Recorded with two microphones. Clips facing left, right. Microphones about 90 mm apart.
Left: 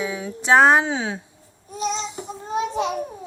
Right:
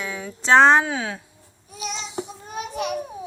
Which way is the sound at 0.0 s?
10° left (ahead or behind).